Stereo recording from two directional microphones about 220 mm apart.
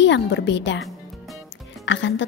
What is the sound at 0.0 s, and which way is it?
Speech, 55° left (ahead or behind).